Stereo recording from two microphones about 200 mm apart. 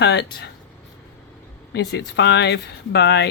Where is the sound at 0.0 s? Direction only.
60° left (ahead or behind).